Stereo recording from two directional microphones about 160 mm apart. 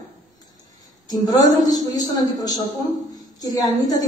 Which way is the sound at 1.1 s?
25° left (ahead or behind).